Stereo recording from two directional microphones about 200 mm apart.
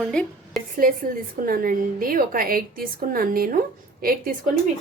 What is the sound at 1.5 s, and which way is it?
A woman's voice, 45° right (ahead or behind).